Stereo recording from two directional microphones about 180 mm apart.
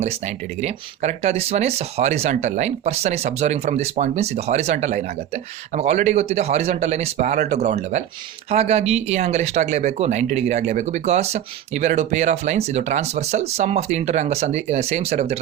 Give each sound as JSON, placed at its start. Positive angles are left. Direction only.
{"t": 0.0, "sound": "speech", "side_deg": -40}